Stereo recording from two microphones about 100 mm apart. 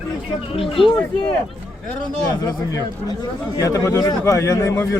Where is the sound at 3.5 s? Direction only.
35° left (ahead or behind).